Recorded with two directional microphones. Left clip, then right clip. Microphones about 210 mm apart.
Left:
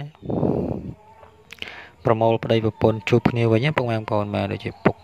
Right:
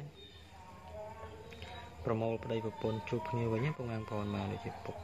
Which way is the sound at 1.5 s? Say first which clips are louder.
Left 13 dB; 45° left (ahead or behind).